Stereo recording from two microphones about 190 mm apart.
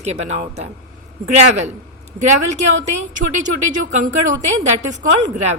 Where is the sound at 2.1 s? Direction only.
40° right (ahead or behind).